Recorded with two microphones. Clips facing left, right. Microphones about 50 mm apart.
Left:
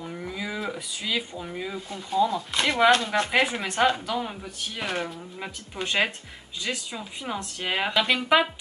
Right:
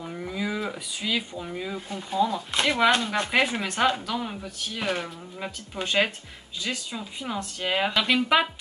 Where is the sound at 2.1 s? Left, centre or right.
Centre.